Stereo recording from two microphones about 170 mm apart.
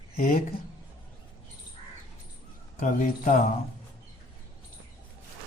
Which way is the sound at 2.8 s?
50° left (ahead or behind).